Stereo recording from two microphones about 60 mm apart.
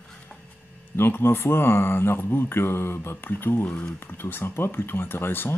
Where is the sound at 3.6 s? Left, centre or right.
Centre.